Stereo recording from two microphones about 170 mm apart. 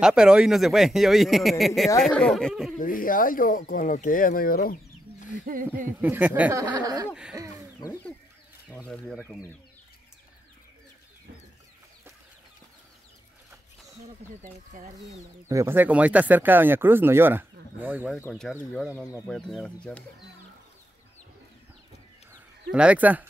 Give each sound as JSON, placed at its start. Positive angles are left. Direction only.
{"t": 0.0, "sound": "speech", "side_deg": -5}
{"t": 2.8, "sound": "speech", "side_deg": 55}
{"t": 5.9, "sound": "speech", "side_deg": -10}
{"t": 6.6, "sound": "speech", "side_deg": -25}
{"t": 15.4, "sound": "speech", "side_deg": -15}
{"t": 18.2, "sound": "speech", "side_deg": 10}
{"t": 22.7, "sound": "speech", "side_deg": -5}